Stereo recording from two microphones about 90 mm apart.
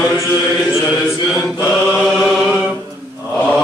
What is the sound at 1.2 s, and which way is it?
Mantra, centre (ahead or behind).